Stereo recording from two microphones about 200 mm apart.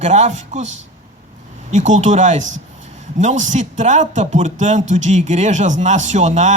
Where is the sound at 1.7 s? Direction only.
35° right (ahead or behind).